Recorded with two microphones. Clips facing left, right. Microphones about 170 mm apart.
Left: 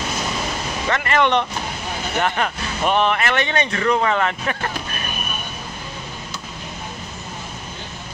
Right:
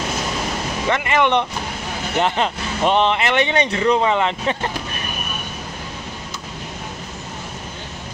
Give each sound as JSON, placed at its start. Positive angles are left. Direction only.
{"t": 0.8, "sound": "speech", "side_deg": -15}